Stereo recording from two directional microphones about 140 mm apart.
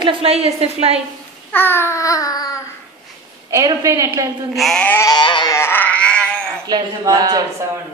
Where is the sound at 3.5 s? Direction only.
25° right (ahead or behind).